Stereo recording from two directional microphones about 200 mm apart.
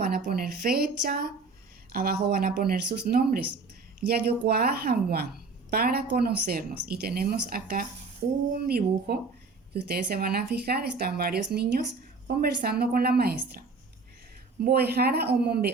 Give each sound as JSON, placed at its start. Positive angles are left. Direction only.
{"t": 0.0, "sound": "speech", "side_deg": -50}
{"t": 14.6, "sound": "speech", "side_deg": -50}